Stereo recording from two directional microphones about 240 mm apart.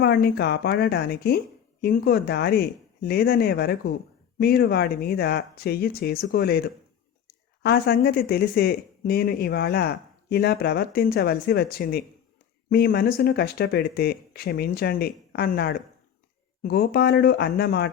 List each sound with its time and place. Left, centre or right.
0.0 s speech: left